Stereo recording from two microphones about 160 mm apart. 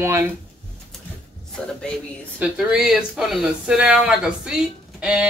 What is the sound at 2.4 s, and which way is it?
Speech, 5° right (ahead or behind).